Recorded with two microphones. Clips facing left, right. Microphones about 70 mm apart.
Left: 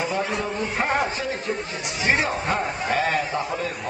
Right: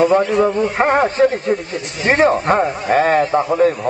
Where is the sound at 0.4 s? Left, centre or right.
Right.